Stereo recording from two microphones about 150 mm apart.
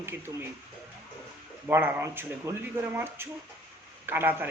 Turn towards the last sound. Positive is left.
turn(degrees=-15)  # may be behind; listen again after turning